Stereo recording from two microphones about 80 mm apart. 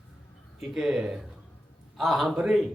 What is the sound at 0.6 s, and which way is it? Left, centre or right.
A man's voice, centre.